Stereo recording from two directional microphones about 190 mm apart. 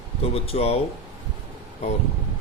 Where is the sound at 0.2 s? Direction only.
30° left (ahead or behind).